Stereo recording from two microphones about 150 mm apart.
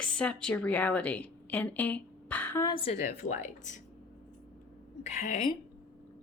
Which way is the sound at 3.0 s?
55° left (ahead or behind).